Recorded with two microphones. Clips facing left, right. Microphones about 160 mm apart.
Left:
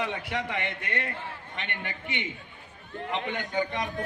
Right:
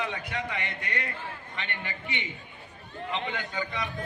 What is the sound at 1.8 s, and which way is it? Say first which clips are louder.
Speech: left 1 dB; 55° left (ahead or behind).